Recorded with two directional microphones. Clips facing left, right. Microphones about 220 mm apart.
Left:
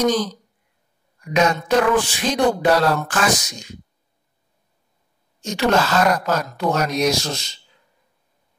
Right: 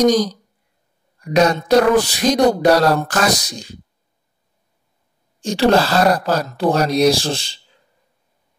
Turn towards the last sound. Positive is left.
turn(degrees=-30)  # may be behind; listen again after turning